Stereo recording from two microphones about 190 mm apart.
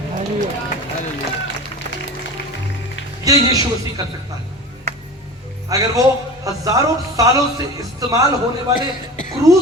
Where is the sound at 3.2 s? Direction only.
20° right (ahead or behind).